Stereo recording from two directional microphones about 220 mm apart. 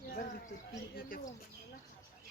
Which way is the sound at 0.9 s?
40° left (ahead or behind).